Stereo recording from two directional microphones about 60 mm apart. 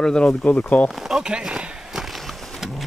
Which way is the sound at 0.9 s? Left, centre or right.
Centre.